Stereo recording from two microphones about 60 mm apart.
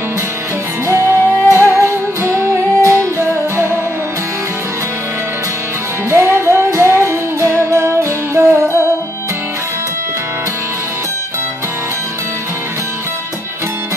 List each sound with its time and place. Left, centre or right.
0.8 s music: right
6.0 s music: right